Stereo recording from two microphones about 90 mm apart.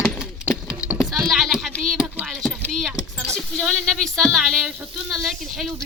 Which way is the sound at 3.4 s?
5° left (ahead or behind).